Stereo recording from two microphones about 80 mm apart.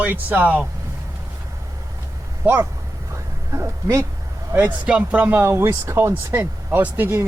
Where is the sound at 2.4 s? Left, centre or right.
Right.